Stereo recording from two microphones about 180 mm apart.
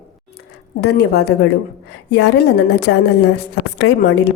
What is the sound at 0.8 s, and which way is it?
A woman's voice, 65° left (ahead or behind).